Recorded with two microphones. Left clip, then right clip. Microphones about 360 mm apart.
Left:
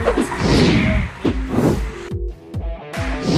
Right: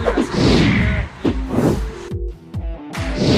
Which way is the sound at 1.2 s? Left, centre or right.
Centre.